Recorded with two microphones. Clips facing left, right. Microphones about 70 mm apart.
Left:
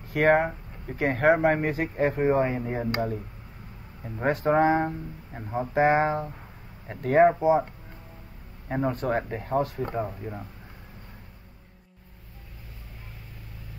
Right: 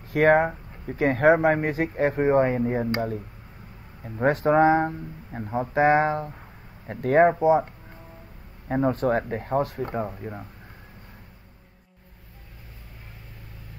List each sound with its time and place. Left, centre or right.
0.1 s speech: right
2.8 s speech: centre
4.2 s speech: right
4.6 s speech: right
5.3 s speech: centre
5.8 s speech: right
8.8 s speech: right